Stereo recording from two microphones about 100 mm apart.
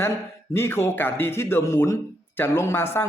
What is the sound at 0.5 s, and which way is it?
Speech, 25° left (ahead or behind).